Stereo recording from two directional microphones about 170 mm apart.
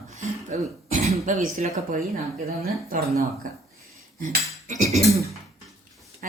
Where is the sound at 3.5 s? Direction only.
50° right (ahead or behind).